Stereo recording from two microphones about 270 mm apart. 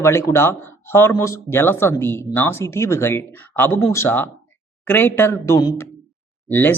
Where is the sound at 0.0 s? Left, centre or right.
Centre.